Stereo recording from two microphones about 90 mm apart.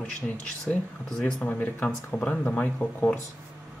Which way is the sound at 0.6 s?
5° left (ahead or behind).